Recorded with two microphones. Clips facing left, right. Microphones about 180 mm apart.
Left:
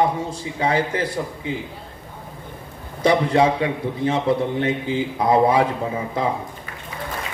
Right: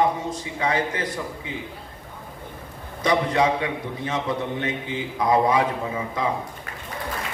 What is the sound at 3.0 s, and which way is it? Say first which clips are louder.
Speech: left 4 dB; 30° left (ahead or behind).